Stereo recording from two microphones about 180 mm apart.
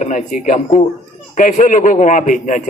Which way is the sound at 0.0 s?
45° left (ahead or behind).